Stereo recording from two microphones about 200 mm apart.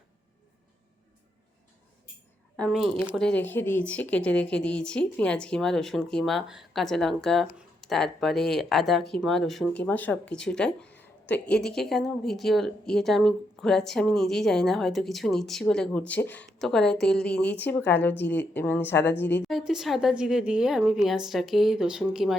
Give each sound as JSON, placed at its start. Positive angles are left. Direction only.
{"t": 2.6, "sound": "a woman's voice", "side_deg": 5}